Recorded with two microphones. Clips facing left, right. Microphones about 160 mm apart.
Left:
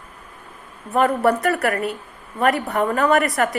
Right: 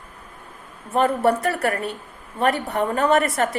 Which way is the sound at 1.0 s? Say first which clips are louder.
Left 1 dB; 25° right (ahead or behind).